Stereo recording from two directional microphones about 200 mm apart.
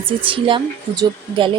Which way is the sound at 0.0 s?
25° right (ahead or behind).